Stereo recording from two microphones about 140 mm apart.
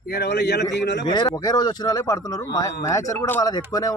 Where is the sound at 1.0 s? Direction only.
35° left (ahead or behind).